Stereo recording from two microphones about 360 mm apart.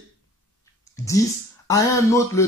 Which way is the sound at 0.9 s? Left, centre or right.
Centre.